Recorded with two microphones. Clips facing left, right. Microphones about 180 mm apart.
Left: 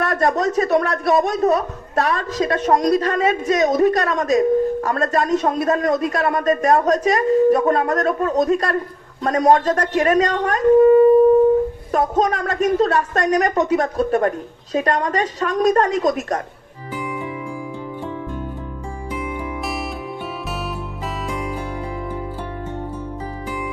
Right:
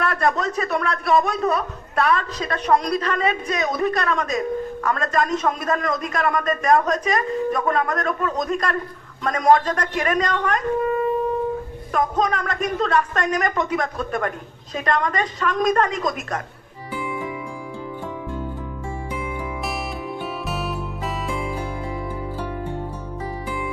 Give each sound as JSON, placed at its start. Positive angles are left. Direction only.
{"t": 0.0, "sound": "speech", "side_deg": 40}